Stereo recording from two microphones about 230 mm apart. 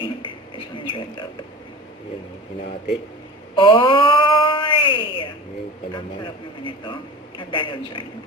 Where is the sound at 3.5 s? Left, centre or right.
Left.